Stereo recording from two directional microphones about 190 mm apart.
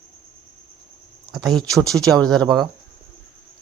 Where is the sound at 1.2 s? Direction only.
Centre (ahead or behind).